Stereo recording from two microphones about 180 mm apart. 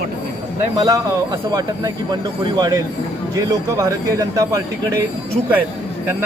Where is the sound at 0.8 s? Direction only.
20° right (ahead or behind).